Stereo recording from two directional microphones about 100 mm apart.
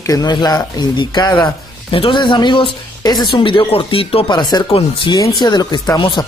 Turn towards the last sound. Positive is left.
turn(degrees=55)  # may be behind; listen again after turning